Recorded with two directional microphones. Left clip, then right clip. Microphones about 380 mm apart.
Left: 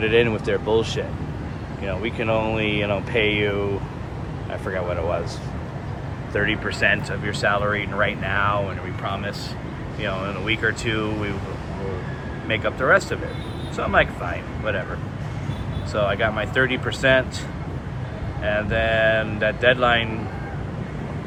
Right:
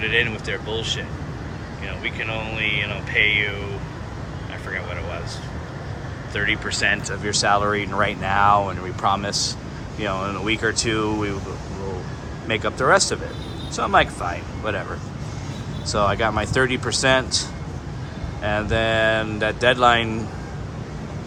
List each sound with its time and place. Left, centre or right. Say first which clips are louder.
0.0 s speech: left 2 dB; centre
6.3 s speech: even; centre
12.5 s speech: right 1 dB; centre
15.9 s speech: right 1 dB; centre
18.7 s speech: even; centre